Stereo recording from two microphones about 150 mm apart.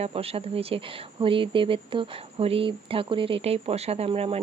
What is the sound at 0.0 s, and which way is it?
Speech, 40° right (ahead or behind).